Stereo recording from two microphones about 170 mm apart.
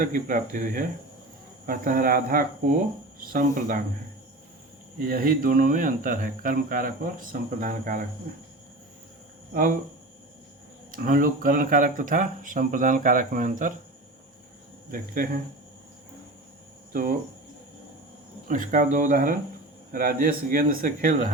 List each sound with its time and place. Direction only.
0.0 s speech: 55° right (ahead or behind)
4.9 s speech: 55° right (ahead or behind)
9.5 s speech: 55° right (ahead or behind)
10.9 s speech: 55° right (ahead or behind)
14.8 s speech: 55° right (ahead or behind)
16.9 s speech: 55° right (ahead or behind)
18.4 s speech: 50° right (ahead or behind)